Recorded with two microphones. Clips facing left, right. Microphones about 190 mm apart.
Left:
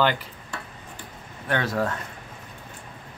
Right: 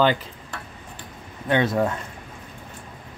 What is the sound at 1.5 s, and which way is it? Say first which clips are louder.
Speech: right 5 dB; 20° right (ahead or behind).